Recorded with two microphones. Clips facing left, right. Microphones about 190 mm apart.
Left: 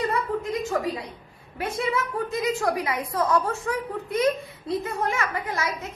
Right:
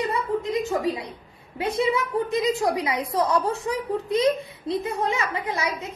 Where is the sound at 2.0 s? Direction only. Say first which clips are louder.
Right 3 dB; 20° right (ahead or behind).